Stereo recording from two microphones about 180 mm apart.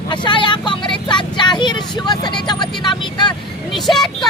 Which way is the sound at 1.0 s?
25° left (ahead or behind).